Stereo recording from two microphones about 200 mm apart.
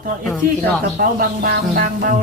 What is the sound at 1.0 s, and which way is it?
Speech, 45° right (ahead or behind).